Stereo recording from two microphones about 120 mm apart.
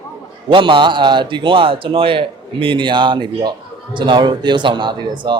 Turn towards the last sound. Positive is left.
turn(degrees=-40)  # may be behind; listen again after turning